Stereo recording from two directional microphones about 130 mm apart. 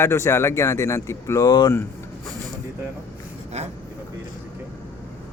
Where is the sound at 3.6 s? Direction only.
60° right (ahead or behind).